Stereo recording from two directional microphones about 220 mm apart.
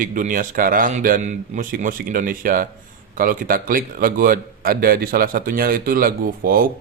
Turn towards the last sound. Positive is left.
turn(degrees=-40)  # may be behind; listen again after turning